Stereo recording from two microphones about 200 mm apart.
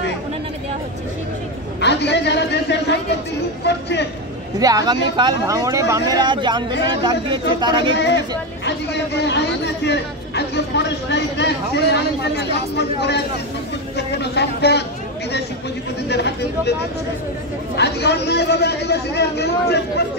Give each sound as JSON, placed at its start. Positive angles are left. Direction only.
{"t": 1.8, "sound": "a sound", "side_deg": 60}
{"t": 3.6, "sound": "speech", "side_deg": 60}
{"t": 4.6, "sound": "speech", "side_deg": -20}
{"t": 8.6, "sound": "speech", "side_deg": 60}
{"t": 16.1, "sound": "speech", "side_deg": 55}
{"t": 17.7, "sound": "speech", "side_deg": 55}